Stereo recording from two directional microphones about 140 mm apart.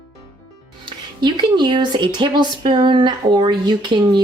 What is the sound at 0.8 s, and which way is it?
Speech, 30° right (ahead or behind).